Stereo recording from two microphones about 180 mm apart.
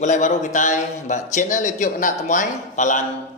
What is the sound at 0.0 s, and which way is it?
A man's voice, 40° left (ahead or behind).